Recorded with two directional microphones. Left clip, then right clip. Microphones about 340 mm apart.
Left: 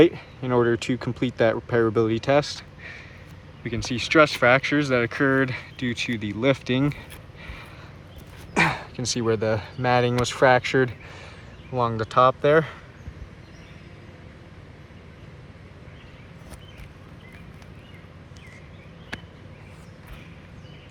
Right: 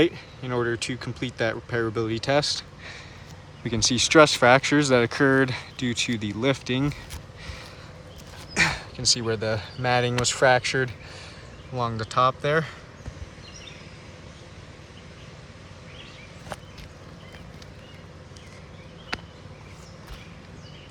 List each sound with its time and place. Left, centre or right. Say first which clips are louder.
0.0 s speech: left 5 dB; centre
7.4 s a sound: even; centre
8.5 s speech: left 1 dB; centre